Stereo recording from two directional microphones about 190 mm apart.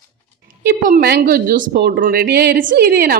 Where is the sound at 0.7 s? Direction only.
50° right (ahead or behind).